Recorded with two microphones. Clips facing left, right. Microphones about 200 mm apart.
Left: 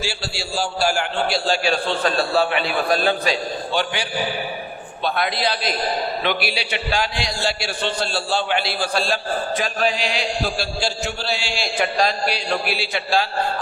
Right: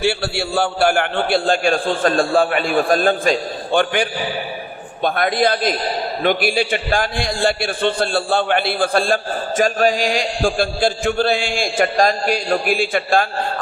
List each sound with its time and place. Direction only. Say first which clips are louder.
0.0 s a man's voice: right 9 dB; 60° right (ahead or behind)